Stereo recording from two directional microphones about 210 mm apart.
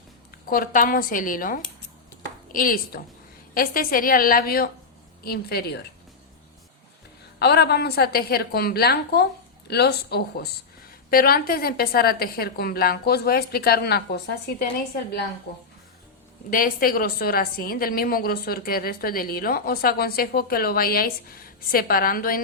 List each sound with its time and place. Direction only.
0.5 s a woman's voice: 40° left (ahead or behind)
7.3 s a woman's voice: 50° left (ahead or behind)